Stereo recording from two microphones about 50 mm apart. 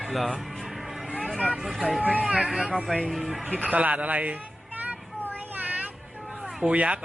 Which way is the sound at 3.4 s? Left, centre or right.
Right.